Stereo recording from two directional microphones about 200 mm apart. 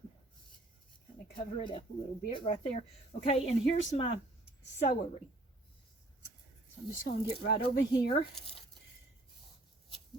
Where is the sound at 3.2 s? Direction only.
30° left (ahead or behind).